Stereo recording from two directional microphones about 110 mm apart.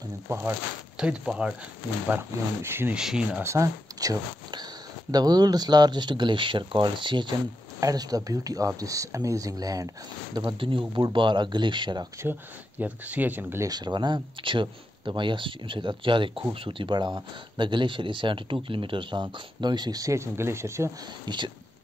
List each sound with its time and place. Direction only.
0.3 s speech: 20° right (ahead or behind)
0.9 s speech: 5° right (ahead or behind)
2.0 s speech: 20° right (ahead or behind)
2.9 s speech: 5° right (ahead or behind)
3.4 s speech: 30° right (ahead or behind); by 7.3 s 45° right (ahead or behind)
7.8 s speech: 35° right (ahead or behind)
10.4 s speech: 50° right (ahead or behind)
12.2 s speech: 15° right (ahead or behind)
13.7 s speech: 40° right (ahead or behind)
21.3 s speech: 40° right (ahead or behind)